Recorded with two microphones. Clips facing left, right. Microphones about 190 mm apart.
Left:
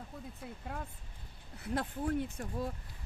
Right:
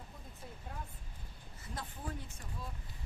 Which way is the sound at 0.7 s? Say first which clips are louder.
Left 5 dB; 70° left (ahead or behind).